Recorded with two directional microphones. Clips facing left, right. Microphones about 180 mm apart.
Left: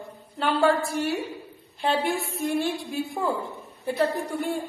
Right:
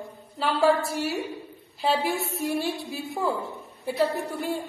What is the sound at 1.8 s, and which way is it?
A woman's voice, 5° right (ahead or behind).